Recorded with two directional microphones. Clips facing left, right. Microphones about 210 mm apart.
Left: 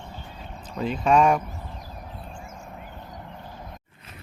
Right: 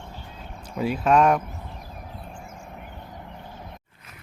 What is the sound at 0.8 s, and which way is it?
Speech, 5° right (ahead or behind).